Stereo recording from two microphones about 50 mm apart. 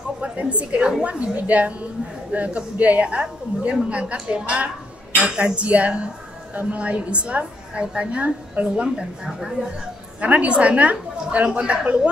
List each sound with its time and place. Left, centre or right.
0.2 s a woman's voice: right
8.8 s speech: centre
10.2 s a woman's voice: right